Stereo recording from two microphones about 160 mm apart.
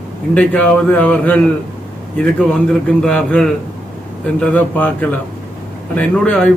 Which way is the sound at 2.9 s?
5° left (ahead or behind).